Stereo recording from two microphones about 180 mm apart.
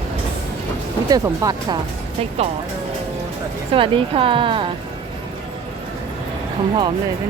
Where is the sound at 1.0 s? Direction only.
20° right (ahead or behind).